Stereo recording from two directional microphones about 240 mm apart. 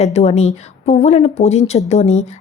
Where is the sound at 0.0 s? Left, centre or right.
Left.